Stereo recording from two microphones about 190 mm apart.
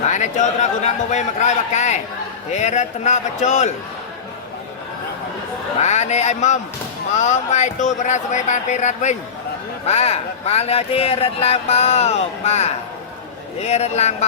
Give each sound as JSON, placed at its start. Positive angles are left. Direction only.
{"t": 0.1, "sound": "speech", "side_deg": 40}
{"t": 5.8, "sound": "speech", "side_deg": 35}